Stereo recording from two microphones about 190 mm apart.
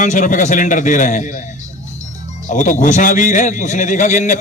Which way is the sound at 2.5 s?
40° left (ahead or behind).